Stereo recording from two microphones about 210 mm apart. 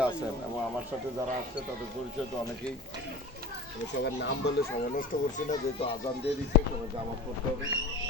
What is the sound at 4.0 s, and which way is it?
A child's voice, 55° left (ahead or behind).